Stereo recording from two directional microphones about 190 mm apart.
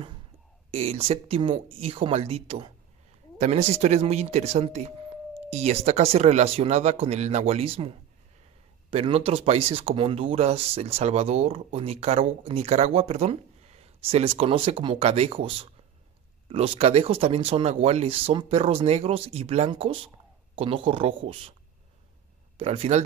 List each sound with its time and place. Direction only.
0.7 s speech: 30° right (ahead or behind)
8.9 s speech: 30° right (ahead or behind)
22.6 s speech: 30° right (ahead or behind)